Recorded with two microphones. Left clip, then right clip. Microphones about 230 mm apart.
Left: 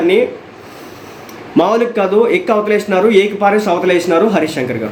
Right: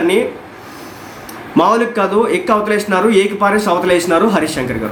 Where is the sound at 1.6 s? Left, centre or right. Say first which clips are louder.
Even; centre.